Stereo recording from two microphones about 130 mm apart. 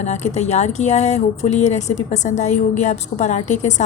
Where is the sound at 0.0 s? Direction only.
60° left (ahead or behind).